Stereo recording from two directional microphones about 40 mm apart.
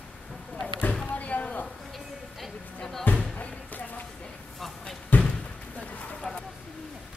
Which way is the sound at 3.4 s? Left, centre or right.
Left.